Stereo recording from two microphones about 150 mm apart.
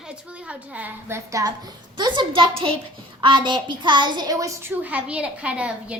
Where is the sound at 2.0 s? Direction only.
30° right (ahead or behind); by 6.0 s 10° right (ahead or behind).